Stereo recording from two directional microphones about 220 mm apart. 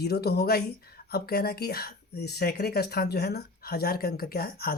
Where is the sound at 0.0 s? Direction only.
45° left (ahead or behind).